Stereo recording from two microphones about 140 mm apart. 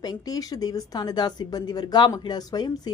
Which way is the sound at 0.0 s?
30° left (ahead or behind).